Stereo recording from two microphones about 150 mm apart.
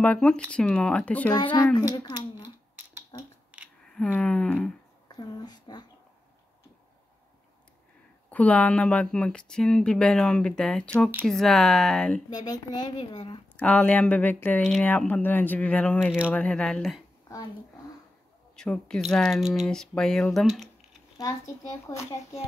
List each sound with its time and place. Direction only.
0.0 s speech: 5° left (ahead or behind)
2.4 s a sound: 15° right (ahead or behind)
3.9 s speech: 5° left (ahead or behind)
5.0 s a sound: 25° left (ahead or behind)
8.3 s speech: 10° left (ahead or behind)
12.3 s a child's voice: 25° left (ahead or behind)
13.6 s speech: 10° left (ahead or behind)
18.6 s speech: 5° left (ahead or behind)
21.2 s a child's voice: 20° left (ahead or behind)